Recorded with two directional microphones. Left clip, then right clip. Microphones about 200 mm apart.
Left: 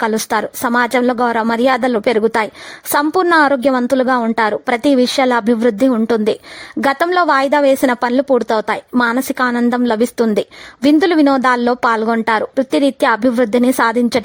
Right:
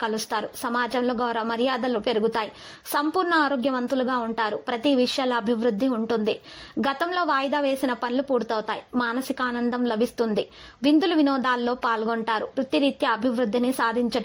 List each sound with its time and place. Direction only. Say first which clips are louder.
0.0 s a woman's voice: left 11 dB; 45° left (ahead or behind)